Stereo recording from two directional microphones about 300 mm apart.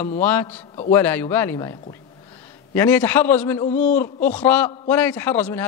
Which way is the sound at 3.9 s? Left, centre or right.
Centre.